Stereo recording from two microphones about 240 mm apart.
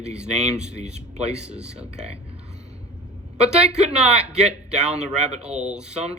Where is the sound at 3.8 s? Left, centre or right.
Right.